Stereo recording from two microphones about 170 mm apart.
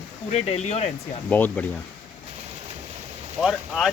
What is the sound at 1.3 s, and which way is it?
Speech, 10° left (ahead or behind).